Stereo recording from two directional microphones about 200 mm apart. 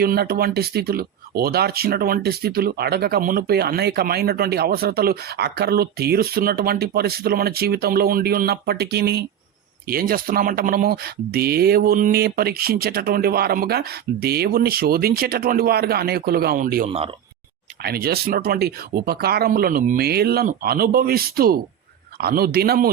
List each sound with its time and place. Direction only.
0.0 s speech: 50° right (ahead or behind)